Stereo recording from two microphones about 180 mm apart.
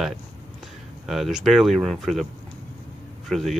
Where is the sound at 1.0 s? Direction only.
Centre (ahead or behind).